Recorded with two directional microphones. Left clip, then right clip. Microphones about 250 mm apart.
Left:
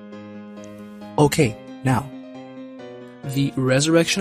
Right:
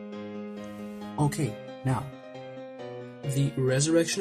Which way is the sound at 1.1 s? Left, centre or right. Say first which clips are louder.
Left 13 dB; left.